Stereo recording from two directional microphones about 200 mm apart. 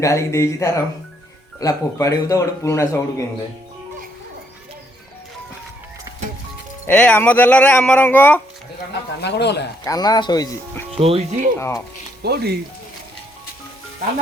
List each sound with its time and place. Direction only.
0.0 s a man's voice: 15° left (ahead or behind)
6.8 s a man's voice: 10° left (ahead or behind)
9.2 s speech: 60° left (ahead or behind)
9.8 s speech: 20° left (ahead or behind)
10.9 s speech: 30° right (ahead or behind)
12.2 s speech: 55° right (ahead or behind)